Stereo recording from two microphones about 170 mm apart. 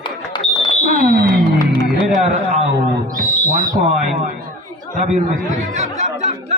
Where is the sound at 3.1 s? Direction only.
50° right (ahead or behind).